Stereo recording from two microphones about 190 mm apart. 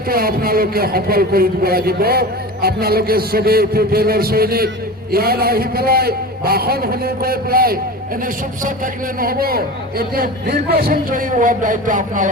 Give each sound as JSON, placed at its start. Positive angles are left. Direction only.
{"t": 0.1, "sound": "a man's voice", "side_deg": -50}